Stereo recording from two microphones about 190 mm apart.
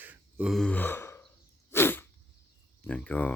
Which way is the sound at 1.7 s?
10° left (ahead or behind).